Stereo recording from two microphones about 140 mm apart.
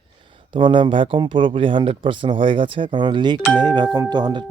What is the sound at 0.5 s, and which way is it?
Speech, 35° right (ahead or behind).